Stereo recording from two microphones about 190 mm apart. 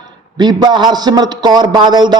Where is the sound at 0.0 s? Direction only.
25° right (ahead or behind).